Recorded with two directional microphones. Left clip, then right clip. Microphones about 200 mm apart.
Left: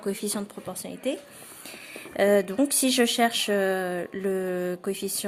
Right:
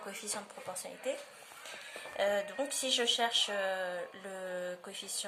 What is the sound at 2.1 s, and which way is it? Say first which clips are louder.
Speech: left 11 dB; 45° left (ahead or behind).